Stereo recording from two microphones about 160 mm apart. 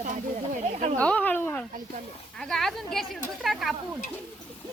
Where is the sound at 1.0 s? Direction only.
10° left (ahead or behind).